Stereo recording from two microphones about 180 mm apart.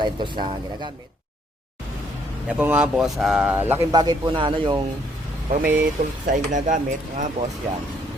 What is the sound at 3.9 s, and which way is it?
Speech, 25° right (ahead or behind).